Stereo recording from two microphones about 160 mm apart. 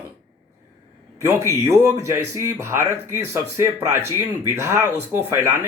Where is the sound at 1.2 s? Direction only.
20° right (ahead or behind).